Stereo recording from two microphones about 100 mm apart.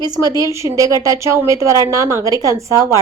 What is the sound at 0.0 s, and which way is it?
A woman's voice, 40° right (ahead or behind).